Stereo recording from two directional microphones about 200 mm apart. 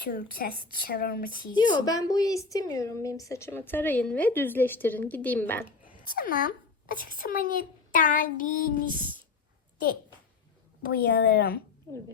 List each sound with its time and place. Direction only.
0.0 s speech: 45° left (ahead or behind)
1.8 s a woman's voice: 20° left (ahead or behind)
6.1 s speech: 45° left (ahead or behind)
7.9 s child singing: 40° left (ahead or behind)
10.8 s speech: 50° left (ahead or behind)